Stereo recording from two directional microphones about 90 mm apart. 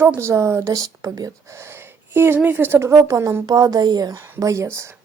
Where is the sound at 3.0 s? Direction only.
40° right (ahead or behind).